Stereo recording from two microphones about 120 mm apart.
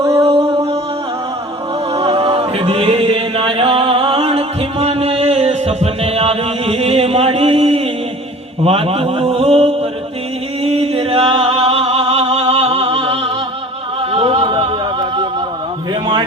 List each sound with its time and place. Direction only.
0.0 s a sound: 25° right (ahead or behind)
1.9 s music: 35° right (ahead or behind)
2.1 s a capella: 50° right (ahead or behind)
8.6 s a man's voice: 55° right (ahead or behind)
10.6 s music: 55° right (ahead or behind)